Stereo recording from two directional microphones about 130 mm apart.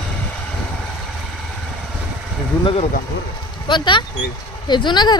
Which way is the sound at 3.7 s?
35° left (ahead or behind).